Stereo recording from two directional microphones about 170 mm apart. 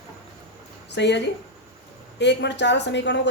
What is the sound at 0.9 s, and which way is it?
A woman's voice, 90° left.